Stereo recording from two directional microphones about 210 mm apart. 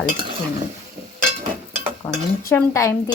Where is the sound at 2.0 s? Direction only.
20° left (ahead or behind).